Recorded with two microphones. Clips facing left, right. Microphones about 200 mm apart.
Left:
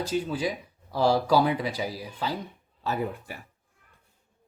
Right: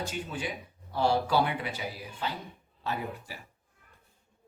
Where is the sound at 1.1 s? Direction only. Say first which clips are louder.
Left 5 dB; 40° left (ahead or behind).